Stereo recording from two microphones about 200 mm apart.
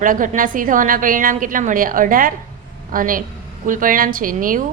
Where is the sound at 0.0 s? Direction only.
40° right (ahead or behind).